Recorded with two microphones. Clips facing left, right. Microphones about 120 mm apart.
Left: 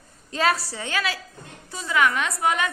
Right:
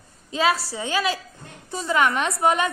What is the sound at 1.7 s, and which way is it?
Speech, 35° right (ahead or behind).